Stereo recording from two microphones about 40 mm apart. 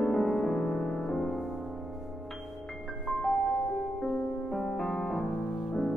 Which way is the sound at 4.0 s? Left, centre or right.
Centre.